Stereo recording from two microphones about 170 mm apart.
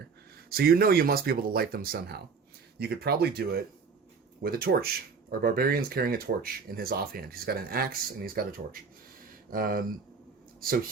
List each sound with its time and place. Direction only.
0.5 s speech: 60° right (ahead or behind)